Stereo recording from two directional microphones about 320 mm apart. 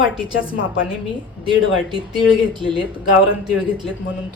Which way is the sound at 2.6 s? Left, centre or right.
Centre.